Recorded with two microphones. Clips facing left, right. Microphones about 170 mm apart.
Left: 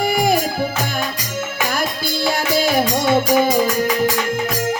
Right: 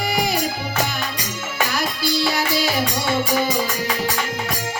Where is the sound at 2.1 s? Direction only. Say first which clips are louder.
Left 4 dB; 50° left (ahead or behind).